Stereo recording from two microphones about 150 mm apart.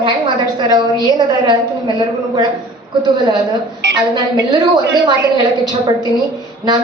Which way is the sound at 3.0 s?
30° right (ahead or behind).